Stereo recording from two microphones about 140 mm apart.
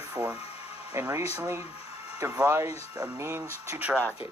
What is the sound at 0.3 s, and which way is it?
Music, 45° left (ahead or behind).